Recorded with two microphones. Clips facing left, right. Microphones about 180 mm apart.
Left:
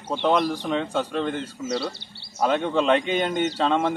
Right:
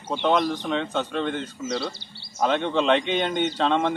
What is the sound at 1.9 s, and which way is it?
Speech, 65° left (ahead or behind).